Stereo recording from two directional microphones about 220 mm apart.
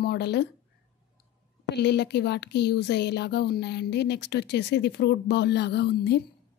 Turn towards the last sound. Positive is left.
turn(degrees=50)  # may be behind; listen again after turning